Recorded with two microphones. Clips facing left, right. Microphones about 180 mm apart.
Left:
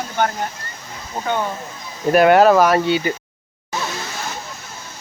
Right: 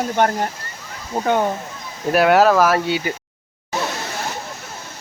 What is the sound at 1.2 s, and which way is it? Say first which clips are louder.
Speech: right 4 dB; 45° right (ahead or behind).